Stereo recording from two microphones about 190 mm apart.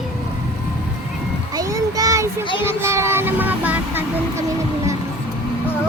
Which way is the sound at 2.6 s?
15° right (ahead or behind).